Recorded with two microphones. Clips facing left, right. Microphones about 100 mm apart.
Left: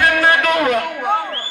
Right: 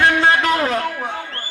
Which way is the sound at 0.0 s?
25° right (ahead or behind).